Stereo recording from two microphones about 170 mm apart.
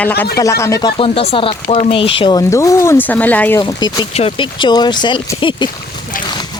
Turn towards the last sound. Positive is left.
turn(degrees=30)  # may be behind; listen again after turning